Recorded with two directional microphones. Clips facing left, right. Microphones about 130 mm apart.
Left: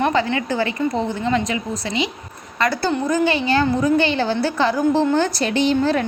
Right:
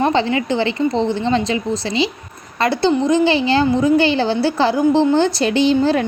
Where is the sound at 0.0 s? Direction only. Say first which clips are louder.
Right 3 dB; 25° right (ahead or behind).